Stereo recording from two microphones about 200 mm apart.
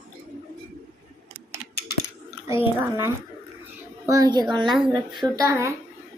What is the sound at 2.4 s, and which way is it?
A child's voice, 10° right (ahead or behind).